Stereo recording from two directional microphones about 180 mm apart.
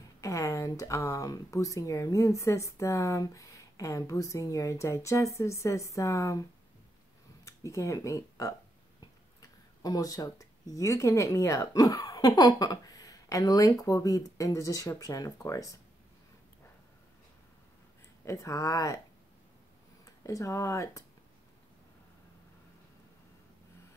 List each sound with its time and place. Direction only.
0.2 s speech: 15° left (ahead or behind)
7.4 s speech: 15° left (ahead or behind)
9.8 s speech: 20° left (ahead or behind)
18.2 s speech: 15° left (ahead or behind)
20.1 s speech: 15° left (ahead or behind)